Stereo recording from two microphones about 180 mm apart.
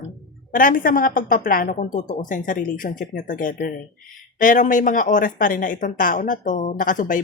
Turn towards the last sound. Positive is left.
turn(degrees=45)  # may be behind; listen again after turning